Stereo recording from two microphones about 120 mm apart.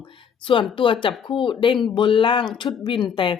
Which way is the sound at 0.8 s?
45° left (ahead or behind).